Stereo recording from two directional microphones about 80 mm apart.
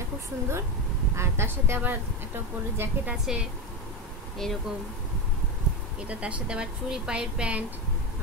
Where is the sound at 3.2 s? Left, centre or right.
Centre.